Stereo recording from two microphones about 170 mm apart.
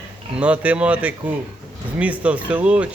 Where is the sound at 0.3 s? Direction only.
10° right (ahead or behind).